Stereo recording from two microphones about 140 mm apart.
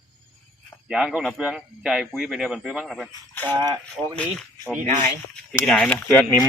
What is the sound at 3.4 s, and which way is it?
Speech, 30° right (ahead or behind).